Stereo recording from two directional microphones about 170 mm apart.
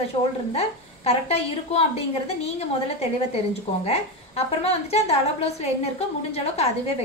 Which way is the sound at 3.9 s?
40° left (ahead or behind).